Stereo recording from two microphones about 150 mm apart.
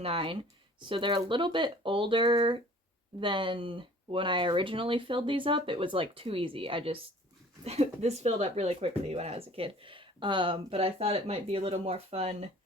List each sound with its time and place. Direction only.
0.0 s speech: 35° right (ahead or behind)